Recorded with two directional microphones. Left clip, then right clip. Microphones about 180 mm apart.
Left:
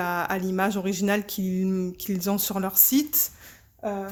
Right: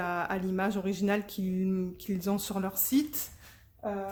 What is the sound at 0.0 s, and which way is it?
Speech, 30° left (ahead or behind).